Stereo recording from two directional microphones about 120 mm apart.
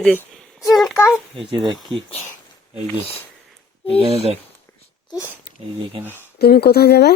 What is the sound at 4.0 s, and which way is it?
Speech, 55° right (ahead or behind).